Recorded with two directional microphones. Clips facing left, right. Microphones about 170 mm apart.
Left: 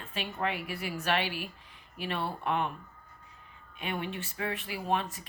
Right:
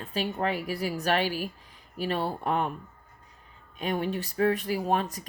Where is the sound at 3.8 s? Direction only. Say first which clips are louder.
Right 6 dB; 40° right (ahead or behind).